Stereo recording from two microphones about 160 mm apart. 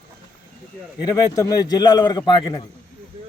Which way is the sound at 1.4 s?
20° left (ahead or behind).